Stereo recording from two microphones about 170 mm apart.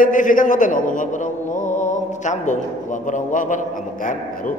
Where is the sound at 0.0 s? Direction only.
50° left (ahead or behind).